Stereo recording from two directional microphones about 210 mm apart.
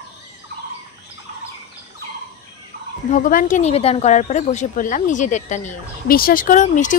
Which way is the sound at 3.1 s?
40° left (ahead or behind).